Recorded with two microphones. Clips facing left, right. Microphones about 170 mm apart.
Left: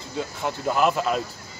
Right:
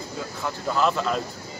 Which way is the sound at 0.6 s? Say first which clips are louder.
Left 1 dB; 15° left (ahead or behind).